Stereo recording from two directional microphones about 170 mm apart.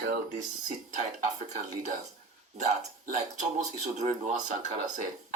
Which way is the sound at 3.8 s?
45° right (ahead or behind).